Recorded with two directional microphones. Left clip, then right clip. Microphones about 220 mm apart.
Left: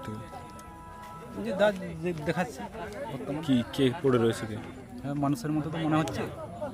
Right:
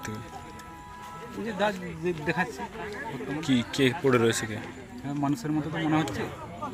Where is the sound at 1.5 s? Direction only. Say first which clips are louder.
Left 3 dB; 30° left (ahead or behind).